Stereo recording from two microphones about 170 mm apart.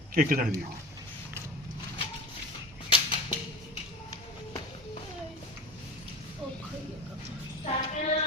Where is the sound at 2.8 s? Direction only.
30° left (ahead or behind).